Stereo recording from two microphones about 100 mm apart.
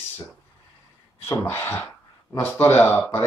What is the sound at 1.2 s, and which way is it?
Speech, 25° left (ahead or behind).